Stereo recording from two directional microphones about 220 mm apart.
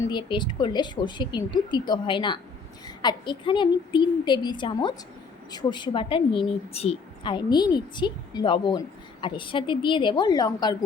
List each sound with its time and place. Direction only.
0.0 s a woman's voice: 20° left (ahead or behind)